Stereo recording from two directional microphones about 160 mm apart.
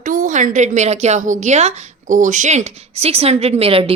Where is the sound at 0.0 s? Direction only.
55° right (ahead or behind).